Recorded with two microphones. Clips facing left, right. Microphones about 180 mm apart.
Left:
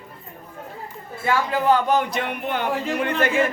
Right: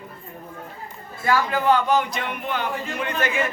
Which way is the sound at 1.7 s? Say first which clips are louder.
Even; 55° left (ahead or behind).